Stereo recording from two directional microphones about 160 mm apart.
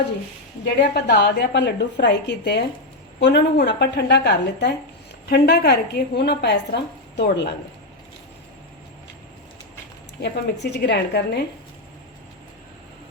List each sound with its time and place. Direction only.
0.6 s a woman's voice: 90° left
10.2 s a woman's voice: 90° left